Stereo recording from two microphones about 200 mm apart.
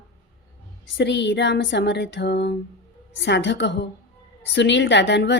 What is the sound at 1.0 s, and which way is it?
A woman's voice, 60° left (ahead or behind).